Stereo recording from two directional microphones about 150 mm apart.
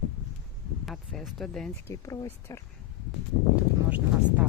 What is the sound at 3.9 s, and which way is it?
Speech, 10° right (ahead or behind).